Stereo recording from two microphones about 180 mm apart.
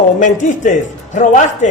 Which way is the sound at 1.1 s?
45° left (ahead or behind).